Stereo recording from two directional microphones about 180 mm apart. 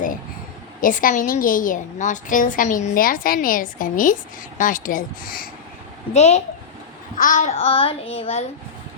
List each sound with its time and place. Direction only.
0.8 s a woman's voice: 50° left (ahead or behind)
6.1 s a child's voice: 35° left (ahead or behind)